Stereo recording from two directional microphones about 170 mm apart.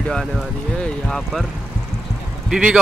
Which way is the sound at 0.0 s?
5° left (ahead or behind).